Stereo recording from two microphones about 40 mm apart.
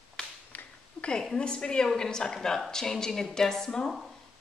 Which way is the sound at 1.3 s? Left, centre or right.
Left.